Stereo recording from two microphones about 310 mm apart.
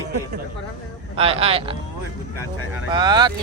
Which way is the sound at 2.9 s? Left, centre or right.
Centre.